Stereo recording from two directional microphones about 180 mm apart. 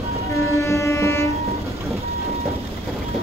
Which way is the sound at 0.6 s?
15° left (ahead or behind).